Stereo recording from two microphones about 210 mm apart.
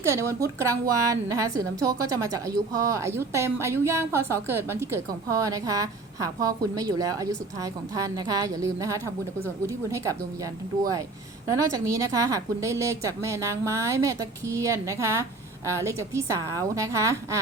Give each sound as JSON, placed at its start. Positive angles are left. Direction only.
{"t": 0.0, "sound": "a woman's voice", "side_deg": -15}
{"t": 11.5, "sound": "a woman's voice", "side_deg": -15}